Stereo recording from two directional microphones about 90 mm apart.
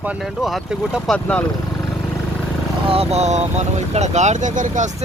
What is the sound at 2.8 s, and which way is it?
Speech, 90° right.